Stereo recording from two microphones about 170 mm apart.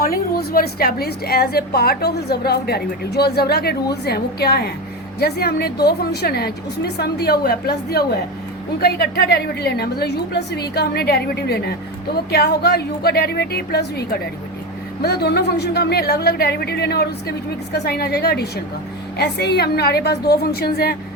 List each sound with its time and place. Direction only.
0.0 s a woman's voice: 60° left (ahead or behind)